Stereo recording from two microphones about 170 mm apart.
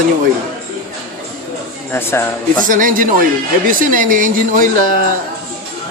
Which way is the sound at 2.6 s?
50° right (ahead or behind).